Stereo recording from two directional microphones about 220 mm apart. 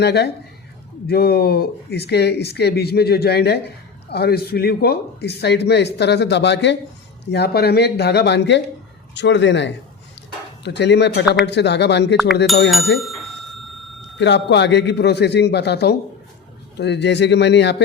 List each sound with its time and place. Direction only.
0.0 s a man's voice: 50° left (ahead or behind)
12.7 s speech: centre (ahead or behind)
14.2 s a man's voice: 50° left (ahead or behind)